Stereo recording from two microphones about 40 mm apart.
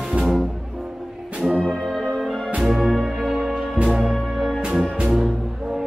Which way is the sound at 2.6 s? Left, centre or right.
Centre.